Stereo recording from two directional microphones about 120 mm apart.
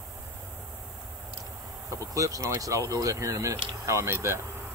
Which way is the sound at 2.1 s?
25° right (ahead or behind).